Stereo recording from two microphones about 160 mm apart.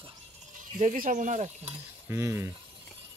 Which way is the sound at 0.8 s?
55° right (ahead or behind).